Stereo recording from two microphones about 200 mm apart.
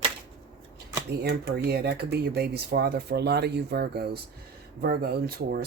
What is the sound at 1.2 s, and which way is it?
Speech, 55° right (ahead or behind).